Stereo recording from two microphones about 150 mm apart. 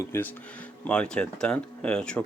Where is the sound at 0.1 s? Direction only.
15° left (ahead or behind).